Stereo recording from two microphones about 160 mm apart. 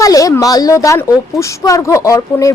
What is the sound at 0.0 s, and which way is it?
A woman's voice, 20° left (ahead or behind).